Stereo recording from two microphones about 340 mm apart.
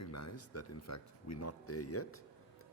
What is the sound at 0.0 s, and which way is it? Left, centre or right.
A man's voice, left.